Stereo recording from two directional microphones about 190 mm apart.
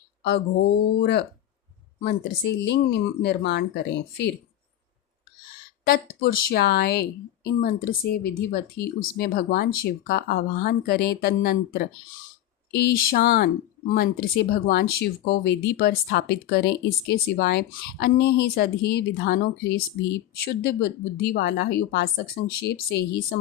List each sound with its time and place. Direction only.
0.2 s a woman's voice: 65° left (ahead or behind)
5.8 s a woman's voice: 50° left (ahead or behind)